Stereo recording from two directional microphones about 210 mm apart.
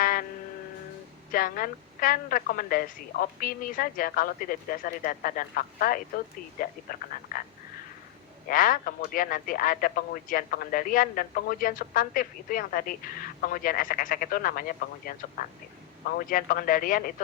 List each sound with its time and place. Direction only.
0.0 s music: 40° left (ahead or behind)
1.3 s speech: 40° left (ahead or behind)
7.3 s a sound: 40° left (ahead or behind)
8.4 s speech: 40° left (ahead or behind)